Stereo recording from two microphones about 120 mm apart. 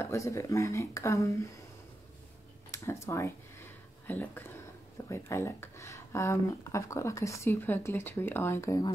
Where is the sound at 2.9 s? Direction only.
25° left (ahead or behind).